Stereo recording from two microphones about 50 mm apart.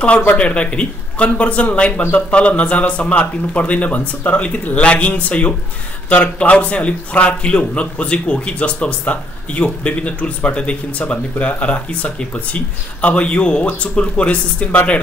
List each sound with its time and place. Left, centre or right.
0.4 s a man's voice: left